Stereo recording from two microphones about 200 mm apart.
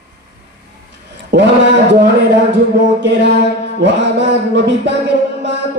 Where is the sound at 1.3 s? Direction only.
55° right (ahead or behind).